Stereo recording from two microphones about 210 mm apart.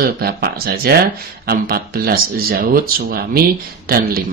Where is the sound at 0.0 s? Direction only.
50° right (ahead or behind).